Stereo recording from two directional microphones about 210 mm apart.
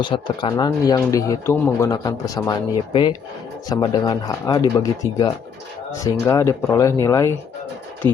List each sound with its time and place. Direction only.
0.0 s speech: 25° left (ahead or behind)